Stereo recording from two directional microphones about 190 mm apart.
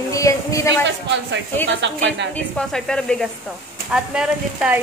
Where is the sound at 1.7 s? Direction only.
70° right (ahead or behind).